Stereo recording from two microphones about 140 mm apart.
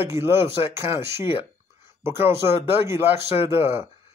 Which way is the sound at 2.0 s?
20° right (ahead or behind).